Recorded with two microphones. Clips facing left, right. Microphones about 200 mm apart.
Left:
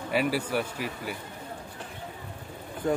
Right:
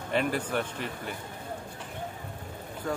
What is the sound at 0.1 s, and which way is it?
Speech, 5° left (ahead or behind).